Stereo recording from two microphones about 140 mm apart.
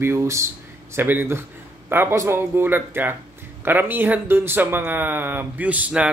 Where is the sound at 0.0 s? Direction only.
20° right (ahead or behind).